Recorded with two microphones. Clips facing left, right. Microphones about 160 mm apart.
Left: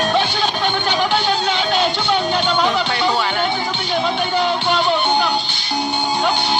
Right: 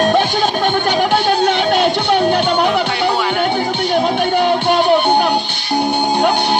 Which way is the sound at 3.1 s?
10° right (ahead or behind).